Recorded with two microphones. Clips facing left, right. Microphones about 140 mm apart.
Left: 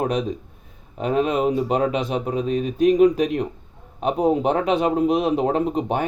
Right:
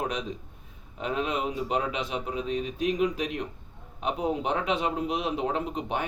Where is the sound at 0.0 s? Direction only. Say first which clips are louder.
Left 9 dB; 40° left (ahead or behind).